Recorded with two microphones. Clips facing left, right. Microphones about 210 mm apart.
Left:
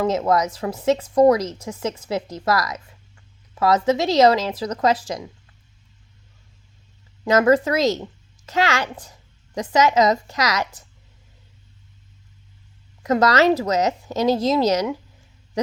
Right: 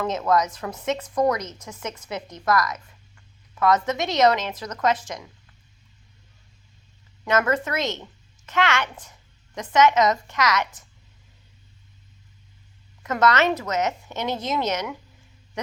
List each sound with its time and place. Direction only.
0.0 s a woman's voice: 25° left (ahead or behind)
7.3 s a woman's voice: 35° left (ahead or behind)
13.0 s a woman's voice: 35° left (ahead or behind)